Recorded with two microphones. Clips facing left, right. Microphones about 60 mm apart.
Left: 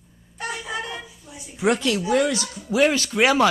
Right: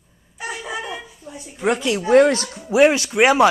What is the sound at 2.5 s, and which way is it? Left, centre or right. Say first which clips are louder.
Speech: right 5 dB; right.